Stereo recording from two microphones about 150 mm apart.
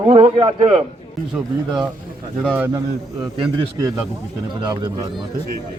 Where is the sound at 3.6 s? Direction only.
25° right (ahead or behind).